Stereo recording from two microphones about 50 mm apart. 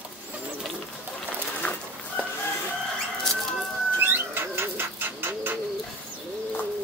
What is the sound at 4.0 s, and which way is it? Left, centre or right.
Bird, right.